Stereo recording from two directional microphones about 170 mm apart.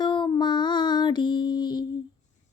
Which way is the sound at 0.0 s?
25° left (ahead or behind).